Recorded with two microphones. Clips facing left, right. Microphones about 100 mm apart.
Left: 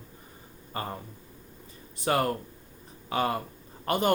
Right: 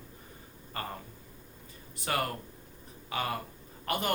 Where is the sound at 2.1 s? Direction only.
30° left (ahead or behind).